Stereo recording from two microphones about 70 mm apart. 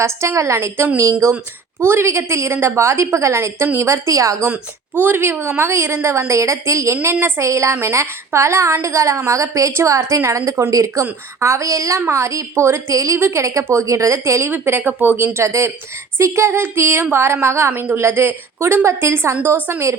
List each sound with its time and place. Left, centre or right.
0.0 s a woman's voice: right
4.5 s a woman's voice: right
13.1 s a woman's voice: right